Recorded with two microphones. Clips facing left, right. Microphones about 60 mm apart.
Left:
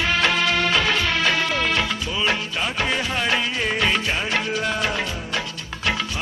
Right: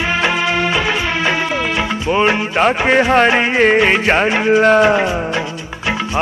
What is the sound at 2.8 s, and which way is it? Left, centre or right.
Music, right.